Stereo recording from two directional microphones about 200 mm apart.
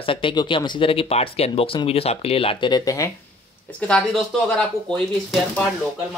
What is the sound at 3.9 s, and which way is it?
Speech, centre (ahead or behind).